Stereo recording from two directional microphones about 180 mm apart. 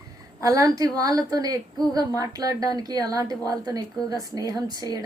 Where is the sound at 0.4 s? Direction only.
20° right (ahead or behind).